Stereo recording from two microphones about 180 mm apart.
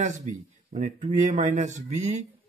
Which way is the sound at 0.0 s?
45° right (ahead or behind).